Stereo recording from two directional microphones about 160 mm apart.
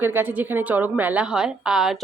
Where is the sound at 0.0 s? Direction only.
10° right (ahead or behind).